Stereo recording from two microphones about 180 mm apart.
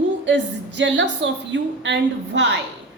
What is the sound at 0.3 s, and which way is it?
A woman's voice, 80° right.